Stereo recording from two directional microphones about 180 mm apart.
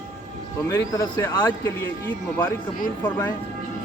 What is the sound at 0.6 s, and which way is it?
Speech, 20° left (ahead or behind).